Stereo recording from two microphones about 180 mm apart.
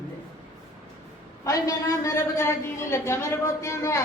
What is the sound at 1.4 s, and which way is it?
A woman's voice, 20° left (ahead or behind).